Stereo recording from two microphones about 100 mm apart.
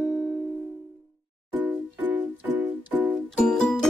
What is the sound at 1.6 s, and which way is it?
Music, 20° right (ahead or behind).